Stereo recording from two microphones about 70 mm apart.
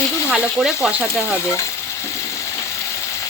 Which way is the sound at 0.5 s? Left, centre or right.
Centre.